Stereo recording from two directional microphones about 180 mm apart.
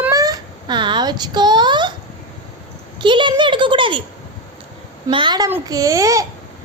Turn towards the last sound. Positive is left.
turn(degrees=-20)  # may be behind; listen again after turning